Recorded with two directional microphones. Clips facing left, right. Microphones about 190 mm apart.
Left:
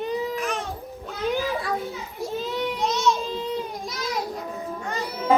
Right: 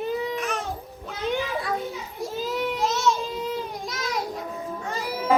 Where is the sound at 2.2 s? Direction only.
Centre (ahead or behind).